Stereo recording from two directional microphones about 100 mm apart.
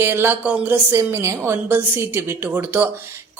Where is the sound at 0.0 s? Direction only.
25° right (ahead or behind).